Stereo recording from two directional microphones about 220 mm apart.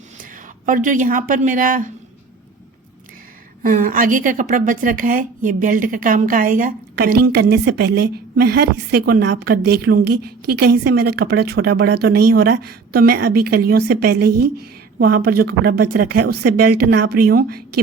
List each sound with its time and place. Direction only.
0.2 s a woman's voice: 35° right (ahead or behind)
3.6 s a woman's voice: 40° right (ahead or behind)